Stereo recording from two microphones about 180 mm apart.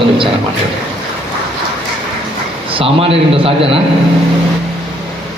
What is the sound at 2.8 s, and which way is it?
A man's voice, 30° right (ahead or behind).